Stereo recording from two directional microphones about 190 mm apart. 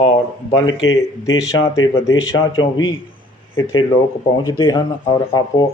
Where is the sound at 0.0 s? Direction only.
30° left (ahead or behind).